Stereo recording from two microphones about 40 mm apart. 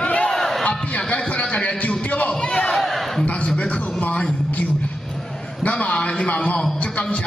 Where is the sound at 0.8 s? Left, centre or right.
Left.